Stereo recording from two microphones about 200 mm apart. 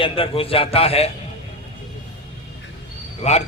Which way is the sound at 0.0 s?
25° left (ahead or behind).